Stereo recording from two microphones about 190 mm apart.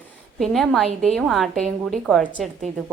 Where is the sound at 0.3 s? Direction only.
Centre (ahead or behind).